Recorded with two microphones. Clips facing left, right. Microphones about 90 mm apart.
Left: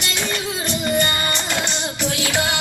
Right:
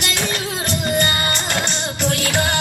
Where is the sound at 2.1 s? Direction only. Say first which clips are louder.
Right 2 dB; 50° right (ahead or behind).